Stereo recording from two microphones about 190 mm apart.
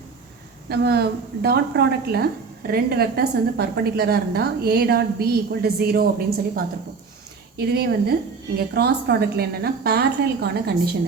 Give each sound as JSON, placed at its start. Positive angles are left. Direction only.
{"t": 0.7, "sound": "a woman's voice", "side_deg": -55}
{"t": 7.5, "sound": "a woman's voice", "side_deg": -55}